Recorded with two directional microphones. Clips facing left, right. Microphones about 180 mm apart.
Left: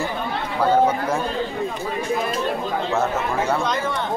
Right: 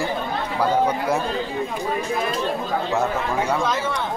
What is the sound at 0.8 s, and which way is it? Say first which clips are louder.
Speech: even; 10° right (ahead or behind).